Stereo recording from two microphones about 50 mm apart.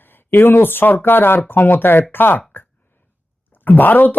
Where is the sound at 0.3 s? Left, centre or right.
Left.